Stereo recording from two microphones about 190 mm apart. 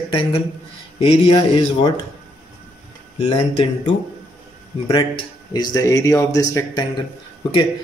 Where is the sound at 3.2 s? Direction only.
30° left (ahead or behind).